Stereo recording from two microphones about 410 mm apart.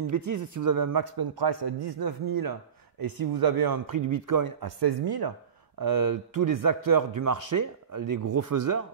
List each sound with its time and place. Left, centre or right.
0.1 s speech: right
2.2 s speech: right